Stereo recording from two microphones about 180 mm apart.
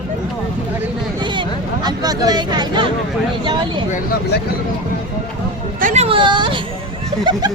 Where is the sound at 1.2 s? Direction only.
25° right (ahead or behind).